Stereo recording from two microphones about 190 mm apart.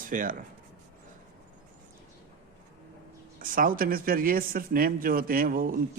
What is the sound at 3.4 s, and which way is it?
Speech, 45° right (ahead or behind).